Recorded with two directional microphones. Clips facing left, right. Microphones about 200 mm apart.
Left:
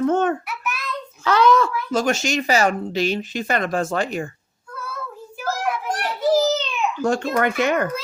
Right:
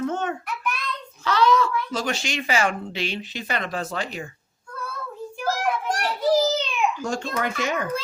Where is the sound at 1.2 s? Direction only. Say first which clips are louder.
Left 3 dB; 50° left (ahead or behind).